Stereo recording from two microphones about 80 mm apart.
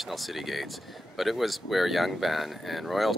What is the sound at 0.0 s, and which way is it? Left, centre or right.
Speech, centre.